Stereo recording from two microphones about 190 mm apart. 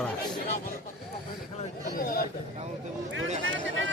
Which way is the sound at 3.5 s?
80° right.